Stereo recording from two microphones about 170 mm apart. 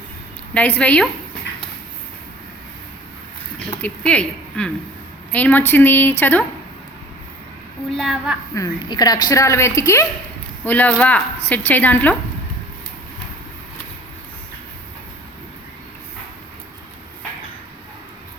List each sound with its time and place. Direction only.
0.5 s a woman's voice: 10° left (ahead or behind)
3.7 s a woman's voice: 10° left (ahead or behind)
7.9 s a woman's voice: centre (ahead or behind)
8.5 s a woman's voice: 20° left (ahead or behind)